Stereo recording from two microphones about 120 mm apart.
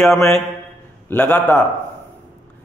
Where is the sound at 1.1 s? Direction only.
10° left (ahead or behind).